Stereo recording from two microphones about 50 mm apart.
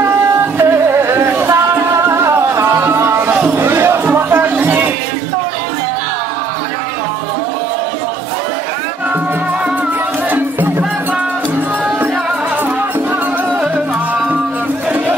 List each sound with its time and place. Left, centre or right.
0.6 s music: right
2.0 s music: right
2.7 s music: right
3.4 s a sound: right
4.0 s music: right